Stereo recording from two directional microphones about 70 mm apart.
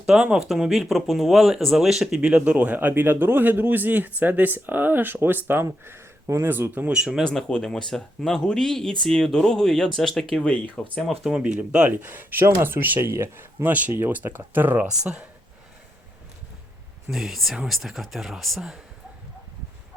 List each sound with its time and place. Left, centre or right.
0.1 s speech: centre; by 5.6 s right
5.8 s a sound: right
6.4 s speech: right
6.9 s speech: centre
7.3 s speech: centre
10.4 s speech: centre
11.3 s speech: centre
12.0 s speech: right
15.0 s speech: centre
17.1 s speech: centre